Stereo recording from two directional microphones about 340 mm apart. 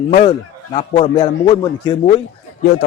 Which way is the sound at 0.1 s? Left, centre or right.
Centre.